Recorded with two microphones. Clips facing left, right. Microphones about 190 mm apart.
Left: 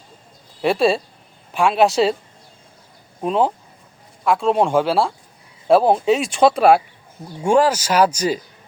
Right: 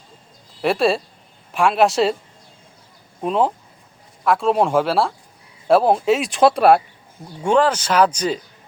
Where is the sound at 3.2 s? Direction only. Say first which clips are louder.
Left 1 dB; centre (ahead or behind).